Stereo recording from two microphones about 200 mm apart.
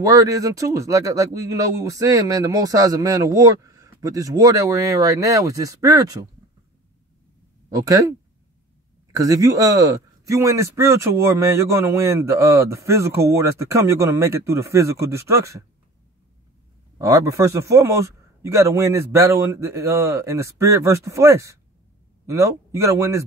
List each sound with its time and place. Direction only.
0.0 s a man's voice: 15° right (ahead or behind)
7.7 s a man's voice: 15° right (ahead or behind)
17.0 s a man's voice: 15° right (ahead or behind)